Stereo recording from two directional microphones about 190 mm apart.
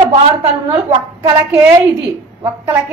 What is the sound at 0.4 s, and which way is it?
Speech, 25° right (ahead or behind).